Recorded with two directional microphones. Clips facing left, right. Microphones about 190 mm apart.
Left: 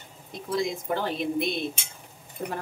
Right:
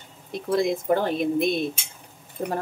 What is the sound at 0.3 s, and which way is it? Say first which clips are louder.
Speech: right 5 dB; 55° right (ahead or behind).